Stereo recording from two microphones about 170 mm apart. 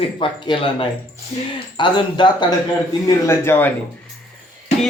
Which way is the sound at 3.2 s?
15° left (ahead or behind).